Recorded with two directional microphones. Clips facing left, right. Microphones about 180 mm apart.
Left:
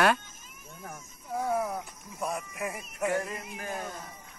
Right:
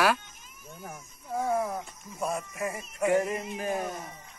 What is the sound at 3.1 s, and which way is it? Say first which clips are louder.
Speech: right 6 dB; 25° right (ahead or behind).